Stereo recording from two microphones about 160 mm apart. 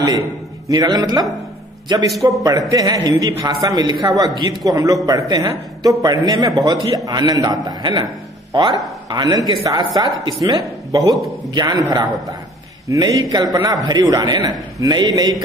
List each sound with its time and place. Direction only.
0.7 s a man's voice: 25° right (ahead or behind)
2.2 s a man's voice: 20° right (ahead or behind)